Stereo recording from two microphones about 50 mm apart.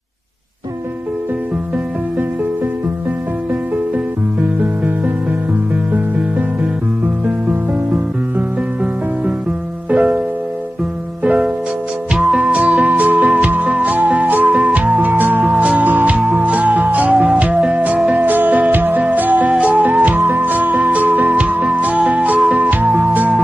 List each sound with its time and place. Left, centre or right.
4.4 s music: right
9.8 s music: right
11.2 s music: right
18.1 s music: right
20.2 s music: right
20.5 s music: right
21.4 s music: right